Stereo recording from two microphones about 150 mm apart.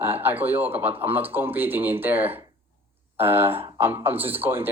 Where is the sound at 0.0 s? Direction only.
15° right (ahead or behind).